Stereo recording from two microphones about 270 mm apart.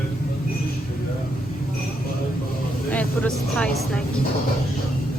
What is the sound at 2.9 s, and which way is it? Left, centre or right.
Speech, centre.